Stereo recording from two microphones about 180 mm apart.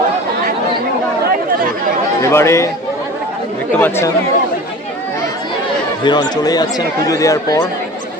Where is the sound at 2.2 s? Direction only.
15° left (ahead or behind).